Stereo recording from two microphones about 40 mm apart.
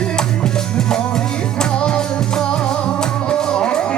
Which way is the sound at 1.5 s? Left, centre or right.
Left.